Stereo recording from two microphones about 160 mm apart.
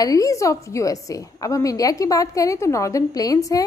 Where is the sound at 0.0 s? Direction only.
20° left (ahead or behind).